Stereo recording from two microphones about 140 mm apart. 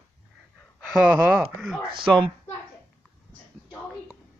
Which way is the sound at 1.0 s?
10° right (ahead or behind).